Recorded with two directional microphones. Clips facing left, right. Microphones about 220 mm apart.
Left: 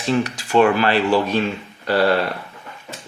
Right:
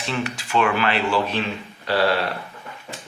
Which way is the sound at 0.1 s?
40° left (ahead or behind).